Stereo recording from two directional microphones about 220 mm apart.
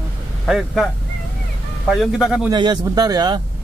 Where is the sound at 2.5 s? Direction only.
20° right (ahead or behind).